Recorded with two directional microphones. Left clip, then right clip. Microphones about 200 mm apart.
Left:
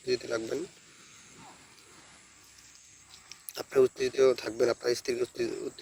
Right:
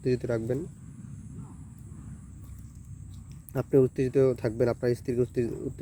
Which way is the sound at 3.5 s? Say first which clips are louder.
Right 2 dB; 5° right (ahead or behind).